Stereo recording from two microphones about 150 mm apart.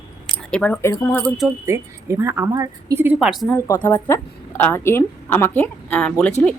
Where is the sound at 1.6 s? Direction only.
20° right (ahead or behind).